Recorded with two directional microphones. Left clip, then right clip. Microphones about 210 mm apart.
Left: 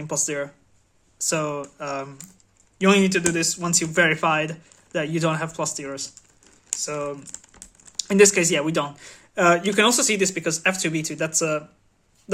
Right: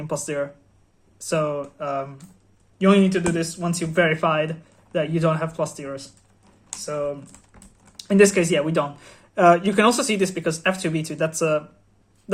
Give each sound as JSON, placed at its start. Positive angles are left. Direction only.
{"t": 0.0, "sound": "speech", "side_deg": 20}